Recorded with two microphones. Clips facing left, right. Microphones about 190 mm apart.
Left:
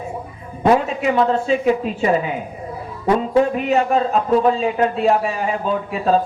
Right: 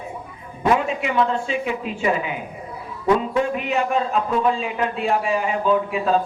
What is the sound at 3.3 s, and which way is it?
A man's voice, 35° left (ahead or behind).